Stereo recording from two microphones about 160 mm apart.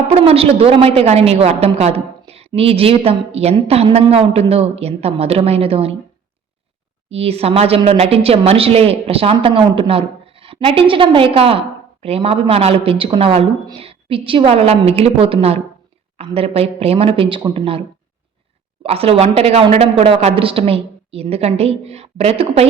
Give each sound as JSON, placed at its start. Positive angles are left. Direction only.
{"t": 0.1, "sound": "a woman's voice", "side_deg": -40}
{"t": 7.1, "sound": "a woman's voice", "side_deg": -40}